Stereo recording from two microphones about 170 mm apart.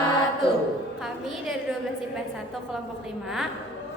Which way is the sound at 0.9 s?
Centre (ahead or behind).